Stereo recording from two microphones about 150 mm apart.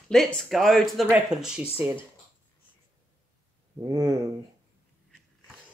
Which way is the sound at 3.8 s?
20° right (ahead or behind).